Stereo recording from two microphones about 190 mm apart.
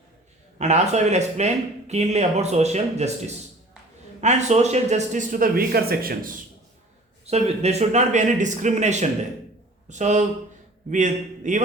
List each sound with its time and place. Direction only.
0.6 s speech: 35° right (ahead or behind)
7.3 s speech: 35° right (ahead or behind)